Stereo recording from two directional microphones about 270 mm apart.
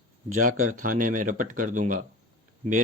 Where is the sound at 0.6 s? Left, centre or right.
Right.